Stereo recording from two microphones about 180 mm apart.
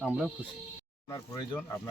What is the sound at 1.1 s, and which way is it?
Speech, 20° left (ahead or behind).